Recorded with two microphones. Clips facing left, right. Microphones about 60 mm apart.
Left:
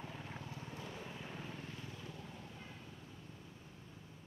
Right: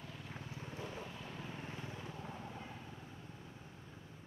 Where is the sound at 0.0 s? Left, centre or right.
Left.